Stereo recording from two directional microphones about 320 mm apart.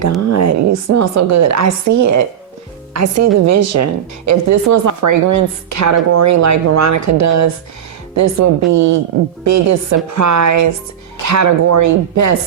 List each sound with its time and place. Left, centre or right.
0.3 s a woman's voice: right